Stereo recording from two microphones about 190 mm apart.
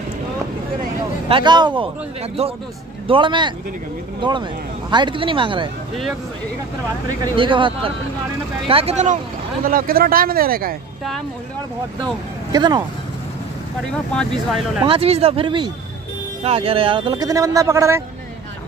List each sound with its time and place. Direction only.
1.3 s speech: 25° right (ahead or behind)
3.1 s speech: 25° right (ahead or behind)
7.1 s speech: 25° right (ahead or behind); by 10.8 s 50° right (ahead or behind)
12.5 s speech: 20° right (ahead or behind)
14.1 s speech: centre (ahead or behind)
14.9 s speech: 30° right (ahead or behind); by 18.0 s 15° right (ahead or behind)